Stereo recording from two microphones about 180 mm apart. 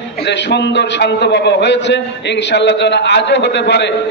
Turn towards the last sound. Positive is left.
turn(degrees=75)  # may be behind; listen again after turning